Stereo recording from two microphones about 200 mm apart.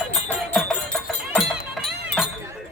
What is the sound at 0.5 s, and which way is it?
Music, 5° left (ahead or behind).